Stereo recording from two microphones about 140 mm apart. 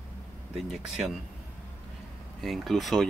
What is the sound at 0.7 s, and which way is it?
Speech, 5° right (ahead or behind).